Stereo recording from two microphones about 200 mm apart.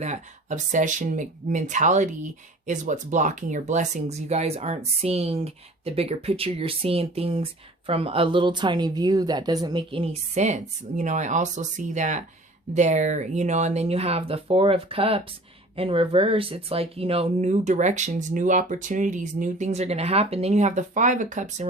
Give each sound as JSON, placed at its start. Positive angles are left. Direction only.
{"t": 0.0, "sound": "speech", "side_deg": -35}